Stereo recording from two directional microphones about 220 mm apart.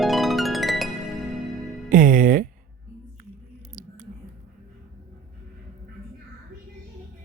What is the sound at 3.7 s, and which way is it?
Scissors, 35° right (ahead or behind).